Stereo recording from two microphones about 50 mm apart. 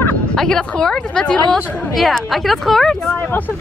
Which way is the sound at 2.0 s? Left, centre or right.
Centre.